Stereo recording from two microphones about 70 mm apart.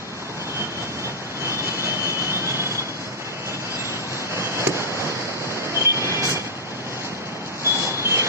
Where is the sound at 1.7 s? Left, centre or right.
Right.